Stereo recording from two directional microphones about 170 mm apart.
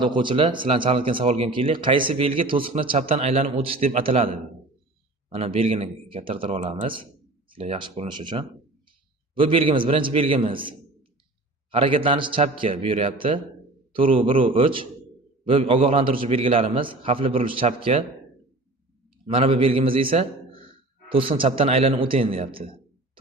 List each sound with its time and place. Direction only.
0.0 s speech: 30° right (ahead or behind)
5.3 s speech: 35° right (ahead or behind)
19.2 s a man's voice: 35° right (ahead or behind)